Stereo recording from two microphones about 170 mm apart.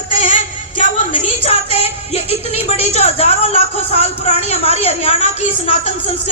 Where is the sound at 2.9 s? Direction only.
40° left (ahead or behind).